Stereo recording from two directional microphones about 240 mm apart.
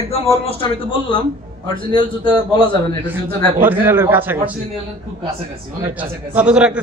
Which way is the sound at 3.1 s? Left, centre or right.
Centre.